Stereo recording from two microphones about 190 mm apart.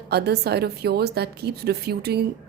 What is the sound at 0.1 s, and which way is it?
Speech, 60° right (ahead or behind).